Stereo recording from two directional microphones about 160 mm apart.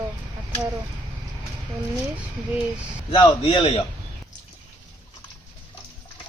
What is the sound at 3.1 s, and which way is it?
Speech, 30° left (ahead or behind).